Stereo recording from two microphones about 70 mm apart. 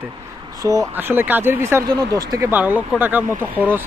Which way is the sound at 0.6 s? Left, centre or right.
Right.